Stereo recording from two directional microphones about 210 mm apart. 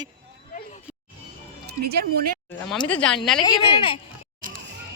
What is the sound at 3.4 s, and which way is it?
Speech, 20° left (ahead or behind).